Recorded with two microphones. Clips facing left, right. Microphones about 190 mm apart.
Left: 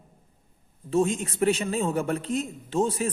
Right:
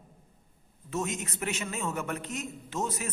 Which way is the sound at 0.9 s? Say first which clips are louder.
Left 9 dB; 30° left (ahead or behind).